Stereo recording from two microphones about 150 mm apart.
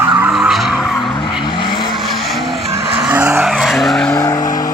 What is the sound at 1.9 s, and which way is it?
Vehicle, centre (ahead or behind).